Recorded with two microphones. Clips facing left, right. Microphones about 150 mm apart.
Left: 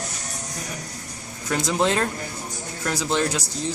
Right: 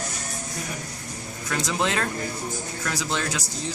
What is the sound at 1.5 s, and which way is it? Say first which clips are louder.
Speech: left 4 dB; 20° left (ahead or behind).